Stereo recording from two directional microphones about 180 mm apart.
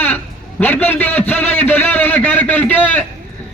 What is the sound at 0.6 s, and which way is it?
Speech, 10° left (ahead or behind).